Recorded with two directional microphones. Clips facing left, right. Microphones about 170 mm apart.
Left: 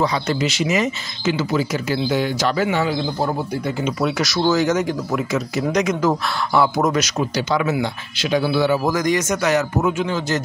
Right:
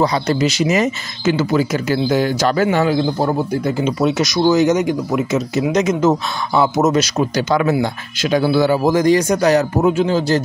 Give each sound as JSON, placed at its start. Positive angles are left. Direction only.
{"t": 0.0, "sound": "speech", "side_deg": -40}
{"t": 3.6, "sound": "speech", "side_deg": -30}
{"t": 8.8, "sound": "speech", "side_deg": -30}